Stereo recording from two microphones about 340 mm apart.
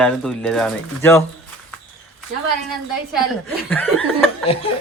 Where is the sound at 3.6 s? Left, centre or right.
Centre.